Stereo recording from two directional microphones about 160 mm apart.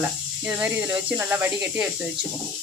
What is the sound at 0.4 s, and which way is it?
Speech, 5° right (ahead or behind).